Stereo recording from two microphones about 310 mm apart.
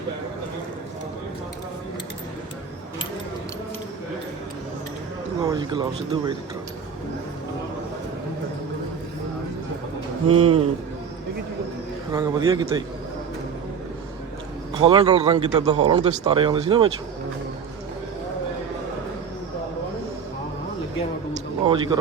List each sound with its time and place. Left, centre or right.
5.4 s speech: centre
10.4 s a man's voice: centre
12.1 s speech: centre
14.8 s speech: centre
21.7 s speech: centre